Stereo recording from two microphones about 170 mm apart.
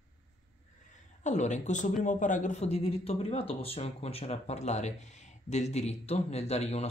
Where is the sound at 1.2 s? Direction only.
45° left (ahead or behind).